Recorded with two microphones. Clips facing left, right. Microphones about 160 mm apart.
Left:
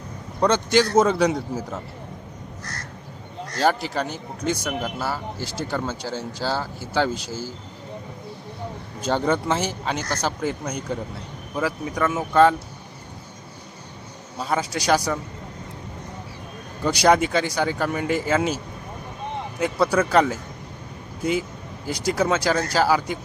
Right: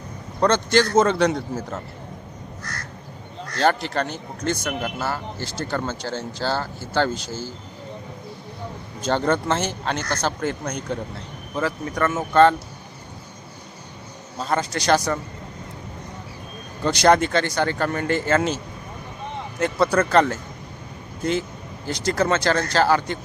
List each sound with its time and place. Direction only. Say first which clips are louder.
0.3 s speech: even; 10° left (ahead or behind)
3.6 s speech: right 1 dB; 5° left (ahead or behind)
9.0 s speech: right 1 dB; 5° left (ahead or behind)
14.3 s speech: right 1 dB; 5° left (ahead or behind)
16.8 s speech: right 1 dB; 5° left (ahead or behind)